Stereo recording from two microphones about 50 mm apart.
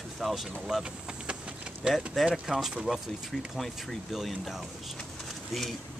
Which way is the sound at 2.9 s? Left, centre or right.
Centre.